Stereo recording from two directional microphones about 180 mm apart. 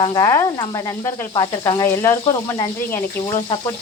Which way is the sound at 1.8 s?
15° left (ahead or behind).